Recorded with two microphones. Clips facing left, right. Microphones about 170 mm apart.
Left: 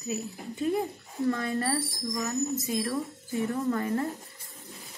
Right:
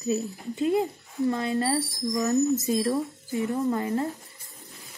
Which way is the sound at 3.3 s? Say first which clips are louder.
Right 2 dB; 20° right (ahead or behind).